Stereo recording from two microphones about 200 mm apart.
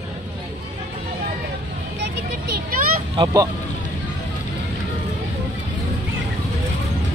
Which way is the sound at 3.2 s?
15° right (ahead or behind).